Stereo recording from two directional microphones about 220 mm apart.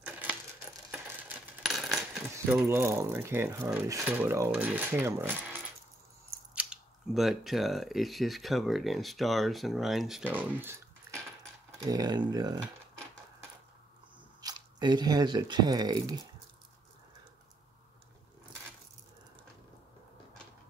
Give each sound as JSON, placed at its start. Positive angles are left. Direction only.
{"t": 0.0, "sound": "coin", "side_deg": -5}
{"t": 2.3, "sound": "speech", "side_deg": -10}
{"t": 14.4, "sound": "speech", "side_deg": -20}